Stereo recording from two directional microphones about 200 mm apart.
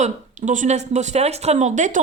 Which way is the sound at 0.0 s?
35° right (ahead or behind).